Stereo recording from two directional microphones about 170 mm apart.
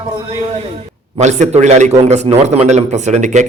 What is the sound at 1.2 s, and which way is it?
A man's voice, 45° right (ahead or behind).